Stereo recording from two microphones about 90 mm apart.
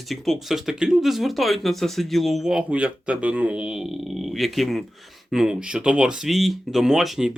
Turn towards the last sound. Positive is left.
turn(degrees=-5)  # may be behind; listen again after turning